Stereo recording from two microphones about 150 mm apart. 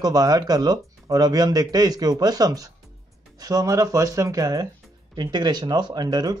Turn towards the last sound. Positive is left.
turn(degrees=-25)  # may be behind; listen again after turning